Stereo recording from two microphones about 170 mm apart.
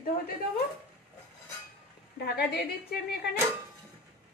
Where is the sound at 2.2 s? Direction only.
75° left (ahead or behind).